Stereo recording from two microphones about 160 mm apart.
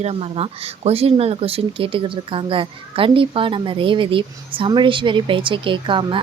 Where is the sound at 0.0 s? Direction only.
40° right (ahead or behind).